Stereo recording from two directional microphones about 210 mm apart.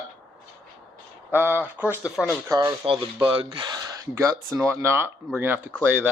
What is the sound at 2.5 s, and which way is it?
Speech, 20° right (ahead or behind).